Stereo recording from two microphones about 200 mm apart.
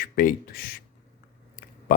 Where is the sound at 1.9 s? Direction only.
45° left (ahead or behind).